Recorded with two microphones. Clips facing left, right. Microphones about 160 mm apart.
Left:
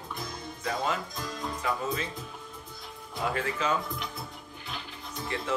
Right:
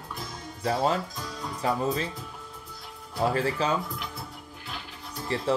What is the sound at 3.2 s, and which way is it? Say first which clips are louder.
Speech: right 5 dB; 35° right (ahead or behind).